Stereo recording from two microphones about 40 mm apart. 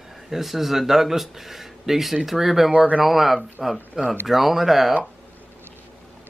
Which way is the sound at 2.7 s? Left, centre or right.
Right.